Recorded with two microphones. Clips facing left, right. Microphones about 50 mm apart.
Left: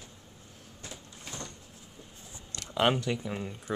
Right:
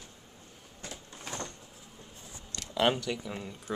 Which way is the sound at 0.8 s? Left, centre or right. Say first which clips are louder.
Right 2 dB; right.